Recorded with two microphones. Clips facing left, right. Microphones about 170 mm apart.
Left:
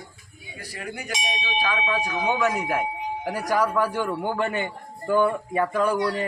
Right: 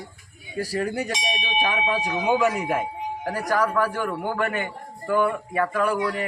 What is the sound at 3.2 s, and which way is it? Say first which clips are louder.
Speech: even; 10° left (ahead or behind).